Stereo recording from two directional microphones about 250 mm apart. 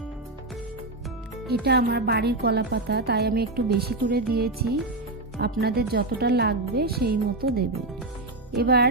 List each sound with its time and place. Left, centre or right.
1.6 s a woman's voice: right